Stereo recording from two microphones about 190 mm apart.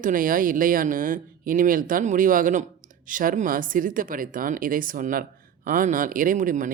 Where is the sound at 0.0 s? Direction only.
45° right (ahead or behind).